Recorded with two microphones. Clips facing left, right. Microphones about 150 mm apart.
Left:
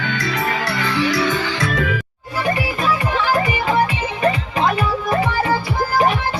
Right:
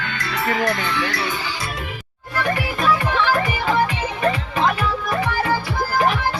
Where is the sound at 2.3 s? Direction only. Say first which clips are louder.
Left 2 dB; 5° left (ahead or behind).